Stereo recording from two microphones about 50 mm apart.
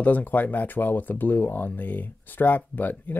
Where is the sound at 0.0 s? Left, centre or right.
Left.